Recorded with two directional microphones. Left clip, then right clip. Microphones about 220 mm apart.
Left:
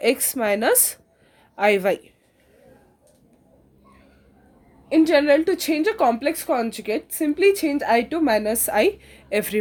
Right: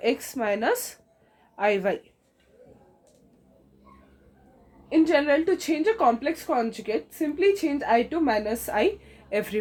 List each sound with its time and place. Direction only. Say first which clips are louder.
0.0 s a woman's voice: left 5 dB; 50° left (ahead or behind)
4.9 s a woman's voice: left 5 dB; 50° left (ahead or behind)